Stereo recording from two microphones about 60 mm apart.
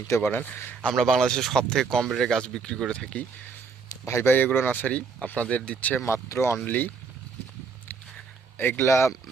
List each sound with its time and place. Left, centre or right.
0.1 s a man's voice: left
0.9 s speech: centre
3.8 s a man's voice: left
6.2 s speech: left
6.7 s a man's voice: left
8.5 s speech: left
8.9 s speech: left